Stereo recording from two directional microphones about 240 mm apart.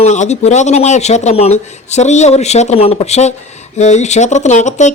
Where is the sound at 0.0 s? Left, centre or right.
Left.